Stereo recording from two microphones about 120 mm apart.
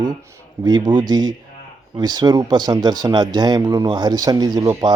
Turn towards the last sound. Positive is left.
turn(degrees=-35)  # may be behind; listen again after turning